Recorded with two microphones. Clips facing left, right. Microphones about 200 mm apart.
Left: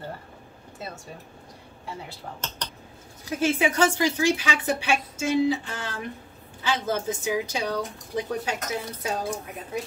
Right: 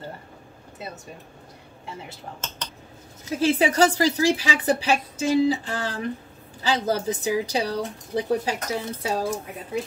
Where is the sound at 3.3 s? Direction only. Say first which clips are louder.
Right 3 dB; 35° right (ahead or behind).